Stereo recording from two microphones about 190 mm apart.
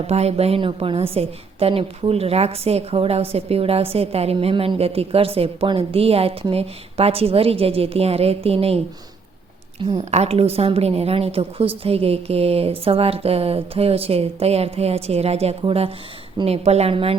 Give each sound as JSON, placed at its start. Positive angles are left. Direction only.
{"t": 0.1, "sound": "a woman's voice", "side_deg": -35}
{"t": 9.8, "sound": "a woman's voice", "side_deg": -35}